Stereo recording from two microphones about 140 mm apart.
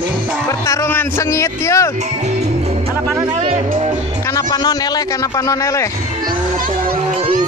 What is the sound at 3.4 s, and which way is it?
Speech, 60° right (ahead or behind).